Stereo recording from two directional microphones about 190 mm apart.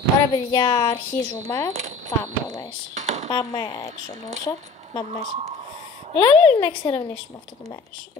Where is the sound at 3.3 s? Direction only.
20° left (ahead or behind).